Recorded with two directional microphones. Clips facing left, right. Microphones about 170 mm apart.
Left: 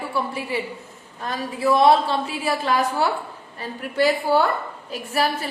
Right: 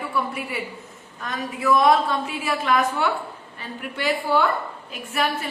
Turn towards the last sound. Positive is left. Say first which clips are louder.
# left 2 dB
turn(degrees=35)  # may be behind; listen again after turning